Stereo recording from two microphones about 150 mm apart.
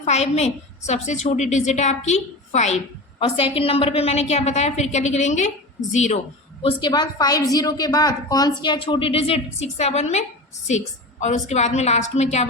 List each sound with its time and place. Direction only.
0.0 s a woman's voice: 45° left (ahead or behind)
3.2 s a woman's voice: 40° left (ahead or behind)
6.6 s a woman's voice: 35° left (ahead or behind)